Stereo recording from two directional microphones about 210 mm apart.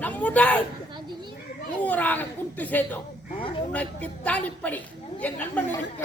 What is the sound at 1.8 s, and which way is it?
Speech, 10° left (ahead or behind).